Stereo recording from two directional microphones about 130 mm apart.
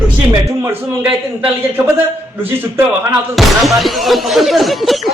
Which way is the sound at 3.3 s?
Centre (ahead or behind).